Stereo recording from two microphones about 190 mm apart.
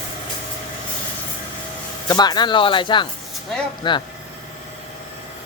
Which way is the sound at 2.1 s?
20° left (ahead or behind).